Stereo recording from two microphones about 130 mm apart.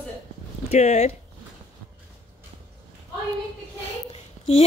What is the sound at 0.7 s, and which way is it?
Speech, 60° left (ahead or behind).